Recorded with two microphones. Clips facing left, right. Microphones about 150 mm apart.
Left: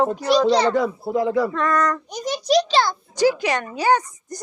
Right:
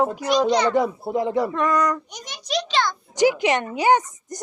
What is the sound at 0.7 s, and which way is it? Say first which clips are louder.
Speech: even; 20° right (ahead or behind).